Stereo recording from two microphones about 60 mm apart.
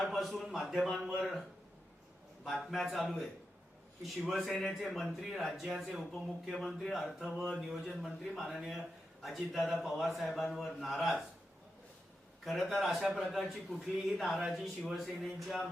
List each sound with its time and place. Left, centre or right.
0.1 s speech: centre
2.6 s a man's voice: centre
12.5 s speech: centre